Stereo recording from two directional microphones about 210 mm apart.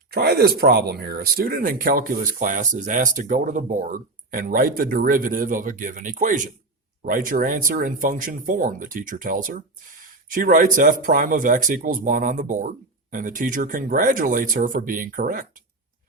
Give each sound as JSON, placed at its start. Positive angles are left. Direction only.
{"t": 0.1, "sound": "speech", "side_deg": -50}